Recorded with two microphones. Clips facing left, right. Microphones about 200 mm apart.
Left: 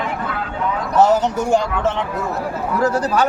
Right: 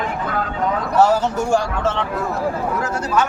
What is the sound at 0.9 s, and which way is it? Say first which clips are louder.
Speech: left 2 dB; 20° left (ahead or behind).